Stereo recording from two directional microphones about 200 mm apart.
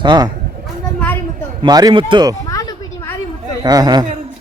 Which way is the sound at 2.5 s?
15° left (ahead or behind).